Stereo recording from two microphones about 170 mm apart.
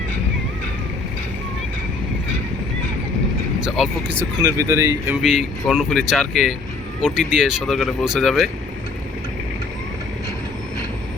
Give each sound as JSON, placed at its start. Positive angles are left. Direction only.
{"t": 3.8, "sound": "speech", "side_deg": 0}
{"t": 4.2, "sound": "speech", "side_deg": -15}
{"t": 5.2, "sound": "speech", "side_deg": 0}